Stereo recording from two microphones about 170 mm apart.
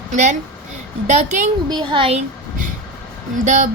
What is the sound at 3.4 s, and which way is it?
Speech, 45° right (ahead or behind).